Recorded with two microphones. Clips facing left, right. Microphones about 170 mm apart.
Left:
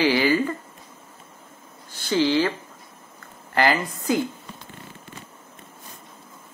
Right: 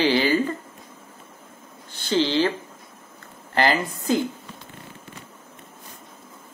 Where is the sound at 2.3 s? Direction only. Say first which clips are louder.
Even; 25° right (ahead or behind).